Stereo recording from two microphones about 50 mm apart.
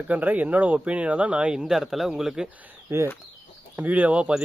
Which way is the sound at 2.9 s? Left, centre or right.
Right.